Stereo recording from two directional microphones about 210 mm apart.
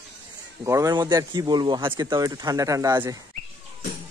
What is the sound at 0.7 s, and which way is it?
Speech, 15° right (ahead or behind).